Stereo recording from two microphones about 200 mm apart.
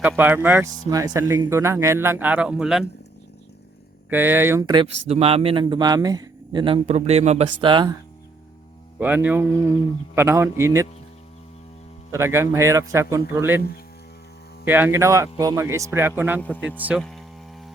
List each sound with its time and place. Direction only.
0.2 s a man's voice: 10° right (ahead or behind)
4.1 s speech: 10° right (ahead or behind)
9.0 s a man's voice: 10° right (ahead or behind)
12.1 s a man's voice: 15° right (ahead or behind)
14.6 s a man's voice: 10° right (ahead or behind)
17.0 s a sound: centre (ahead or behind)